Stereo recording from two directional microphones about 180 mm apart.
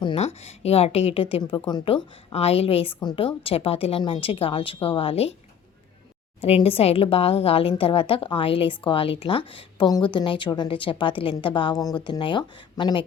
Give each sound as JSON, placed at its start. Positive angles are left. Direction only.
{"t": 0.0, "sound": "a woman's voice", "side_deg": 35}
{"t": 6.4, "sound": "a woman's voice", "side_deg": 35}